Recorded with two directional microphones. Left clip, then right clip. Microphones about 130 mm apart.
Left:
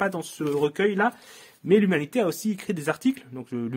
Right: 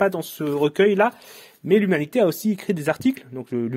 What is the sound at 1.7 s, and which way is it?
Speech, 35° right (ahead or behind).